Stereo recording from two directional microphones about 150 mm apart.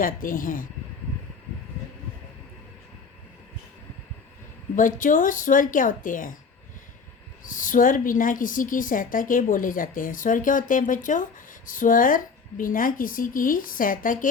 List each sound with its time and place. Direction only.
0.0 s speech: 70° left (ahead or behind)
4.7 s a woman's voice: 60° left (ahead or behind)
7.4 s a woman's voice: 65° left (ahead or behind)